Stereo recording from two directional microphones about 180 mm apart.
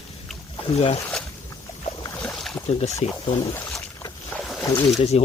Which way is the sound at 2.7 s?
35° left (ahead or behind).